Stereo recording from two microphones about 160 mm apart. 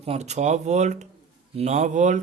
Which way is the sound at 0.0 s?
40° right (ahead or behind).